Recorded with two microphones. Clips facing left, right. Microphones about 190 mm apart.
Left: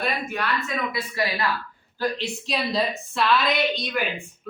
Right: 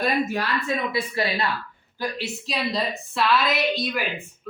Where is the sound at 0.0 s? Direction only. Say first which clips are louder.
Right 4 dB; 35° right (ahead or behind).